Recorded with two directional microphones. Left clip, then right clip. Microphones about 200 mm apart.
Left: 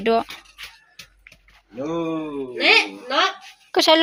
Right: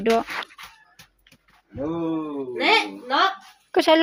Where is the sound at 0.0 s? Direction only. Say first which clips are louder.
Left 1 dB; 10° right (ahead or behind).